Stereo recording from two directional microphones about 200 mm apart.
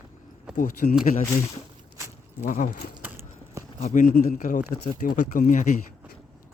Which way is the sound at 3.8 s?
40° left (ahead or behind).